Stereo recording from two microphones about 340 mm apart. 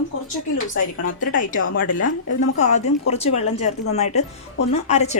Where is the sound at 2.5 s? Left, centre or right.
Centre.